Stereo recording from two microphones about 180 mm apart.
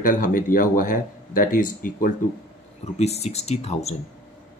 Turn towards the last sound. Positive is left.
turn(degrees=35)  # may be behind; listen again after turning